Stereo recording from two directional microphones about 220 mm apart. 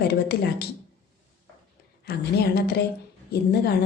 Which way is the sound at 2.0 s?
45° left (ahead or behind).